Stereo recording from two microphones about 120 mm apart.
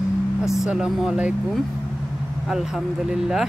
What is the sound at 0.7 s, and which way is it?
Speech, 5° right (ahead or behind).